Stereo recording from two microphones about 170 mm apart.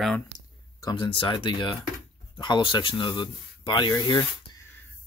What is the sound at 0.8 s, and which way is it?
Speech, 30° left (ahead or behind).